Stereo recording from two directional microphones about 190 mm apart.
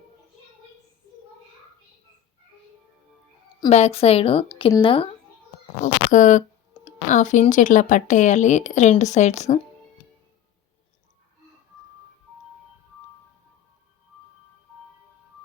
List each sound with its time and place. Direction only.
3.7 s speech: 35° left (ahead or behind)
5.8 s speech: 40° left (ahead or behind)
6.8 s a sound: 30° left (ahead or behind)
7.1 s speech: 40° left (ahead or behind)